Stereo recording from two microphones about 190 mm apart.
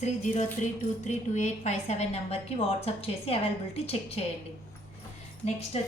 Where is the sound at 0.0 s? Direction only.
35° left (ahead or behind).